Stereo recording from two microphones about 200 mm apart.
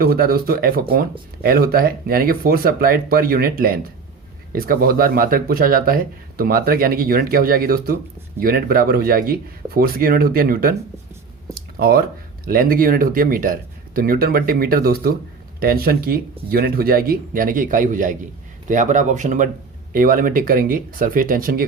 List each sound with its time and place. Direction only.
0.0 s speech: 50° right (ahead or behind)
11.5 s a sound: 50° right (ahead or behind)
12.5 s speech: 45° right (ahead or behind)